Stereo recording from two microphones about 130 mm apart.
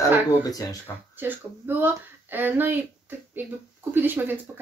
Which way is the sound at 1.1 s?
15° right (ahead or behind).